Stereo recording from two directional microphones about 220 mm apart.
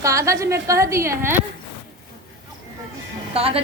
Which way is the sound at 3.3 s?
25° right (ahead or behind).